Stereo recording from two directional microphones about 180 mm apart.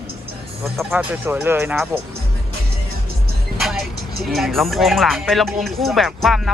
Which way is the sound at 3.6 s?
Centre (ahead or behind).